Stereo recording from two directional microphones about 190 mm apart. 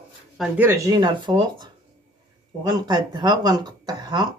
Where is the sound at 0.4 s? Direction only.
10° right (ahead or behind).